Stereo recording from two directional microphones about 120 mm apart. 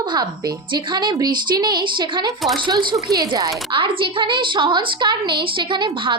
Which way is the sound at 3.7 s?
45° right (ahead or behind).